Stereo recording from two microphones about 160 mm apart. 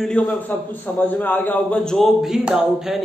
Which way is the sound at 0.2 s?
10° left (ahead or behind).